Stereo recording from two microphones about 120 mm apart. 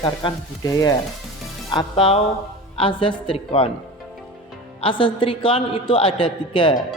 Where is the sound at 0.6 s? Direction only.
30° left (ahead or behind).